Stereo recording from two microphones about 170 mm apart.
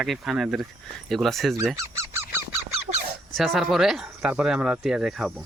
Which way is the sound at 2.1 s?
15° right (ahead or behind).